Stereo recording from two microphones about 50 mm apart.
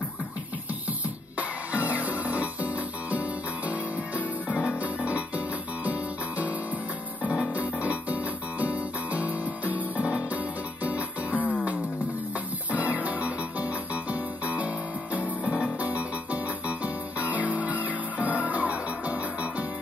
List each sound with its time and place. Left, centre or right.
1.7 s music: right
4.8 s music: right
7.5 s music: right
12.7 s music: right